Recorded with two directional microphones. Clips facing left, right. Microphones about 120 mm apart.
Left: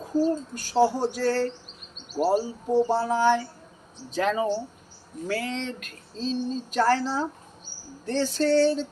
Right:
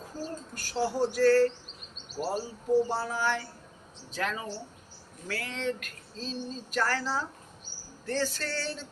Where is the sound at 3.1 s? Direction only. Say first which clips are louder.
Left 9 dB; 25° left (ahead or behind).